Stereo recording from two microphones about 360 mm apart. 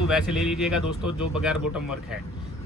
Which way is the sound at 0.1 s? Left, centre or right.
Centre.